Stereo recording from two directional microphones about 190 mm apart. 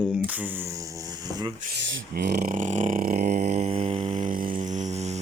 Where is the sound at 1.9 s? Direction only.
55° right (ahead or behind).